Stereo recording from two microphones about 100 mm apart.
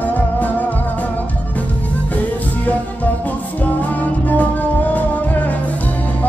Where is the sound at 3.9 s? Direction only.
15° left (ahead or behind).